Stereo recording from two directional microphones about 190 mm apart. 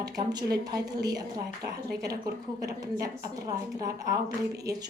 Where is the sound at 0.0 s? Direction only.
20° right (ahead or behind).